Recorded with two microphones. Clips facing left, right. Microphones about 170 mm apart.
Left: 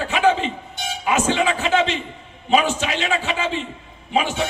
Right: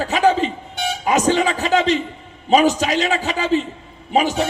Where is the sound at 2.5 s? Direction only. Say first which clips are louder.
Right 4 dB; 40° right (ahead or behind).